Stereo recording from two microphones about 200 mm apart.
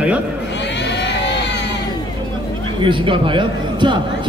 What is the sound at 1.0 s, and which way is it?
Vehicle, 60° left (ahead or behind).